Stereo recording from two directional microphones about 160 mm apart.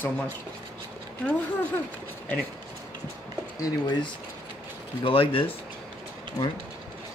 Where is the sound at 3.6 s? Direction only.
25° left (ahead or behind).